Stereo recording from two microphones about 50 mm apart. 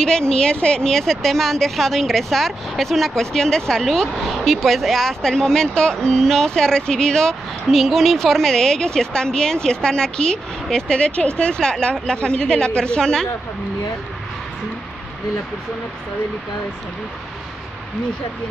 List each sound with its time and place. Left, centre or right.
0.3 s speech: centre
7.6 s speech: centre